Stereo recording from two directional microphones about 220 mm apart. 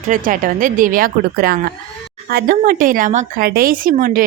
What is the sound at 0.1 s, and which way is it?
A woman's voice, 40° right (ahead or behind).